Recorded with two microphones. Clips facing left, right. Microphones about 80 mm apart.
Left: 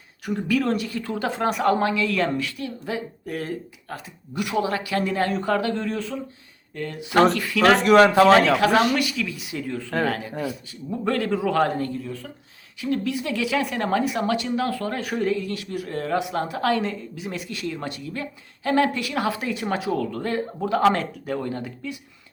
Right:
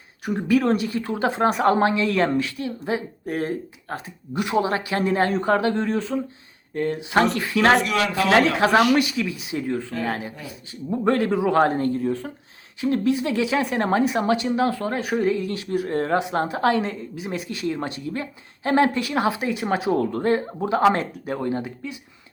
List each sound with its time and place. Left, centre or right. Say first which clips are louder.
0.3 s speech: right 3 dB; right
7.8 s speech: left 8 dB; left
8.5 s speech: right 2 dB; right
12.8 s speech: right 4 dB; right